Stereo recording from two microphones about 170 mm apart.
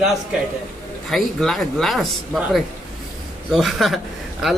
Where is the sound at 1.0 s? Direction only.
Centre (ahead or behind).